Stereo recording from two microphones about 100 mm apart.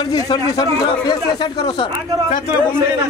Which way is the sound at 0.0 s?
45° left (ahead or behind).